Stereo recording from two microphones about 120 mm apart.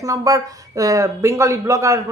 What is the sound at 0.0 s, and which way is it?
A woman's voice, 30° right (ahead or behind).